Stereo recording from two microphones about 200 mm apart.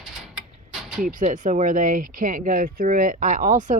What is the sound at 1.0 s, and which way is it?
Speech, 40° right (ahead or behind).